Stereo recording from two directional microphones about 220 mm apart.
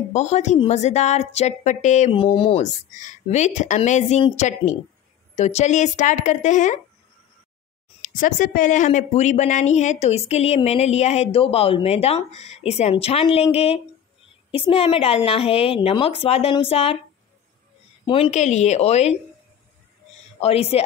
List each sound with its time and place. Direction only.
0.1 s a woman's voice: 30° left (ahead or behind)
8.0 s a woman's voice: 35° left (ahead or behind)
18.0 s a woman's voice: 25° left (ahead or behind)
20.3 s a woman's voice: 30° left (ahead or behind)